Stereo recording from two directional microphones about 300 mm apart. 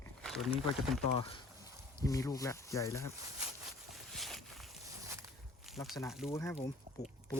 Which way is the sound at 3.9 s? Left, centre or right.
Centre.